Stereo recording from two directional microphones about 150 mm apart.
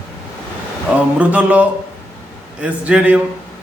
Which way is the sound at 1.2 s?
10° right (ahead or behind).